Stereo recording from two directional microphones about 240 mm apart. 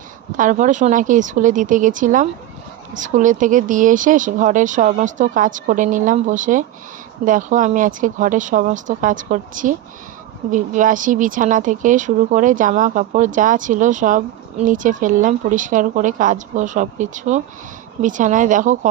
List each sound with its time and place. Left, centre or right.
0.3 s speech: right